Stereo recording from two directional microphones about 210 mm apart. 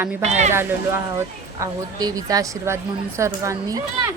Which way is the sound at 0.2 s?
30° right (ahead or behind).